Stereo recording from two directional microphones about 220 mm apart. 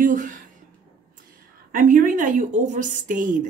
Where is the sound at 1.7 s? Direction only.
35° right (ahead or behind).